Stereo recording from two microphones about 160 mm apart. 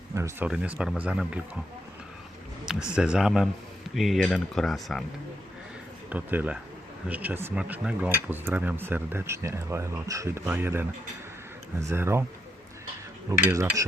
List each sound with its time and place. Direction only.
0.1 s speech: 20° right (ahead or behind)
2.6 s speech: 5° right (ahead or behind)
6.1 s speech: 10° right (ahead or behind)
13.3 s cutlery: 20° right (ahead or behind)